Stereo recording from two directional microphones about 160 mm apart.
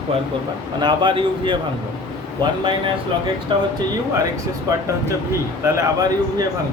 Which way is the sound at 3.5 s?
30° right (ahead or behind).